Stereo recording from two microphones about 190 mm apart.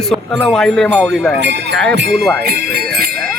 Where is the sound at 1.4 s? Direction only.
65° right (ahead or behind).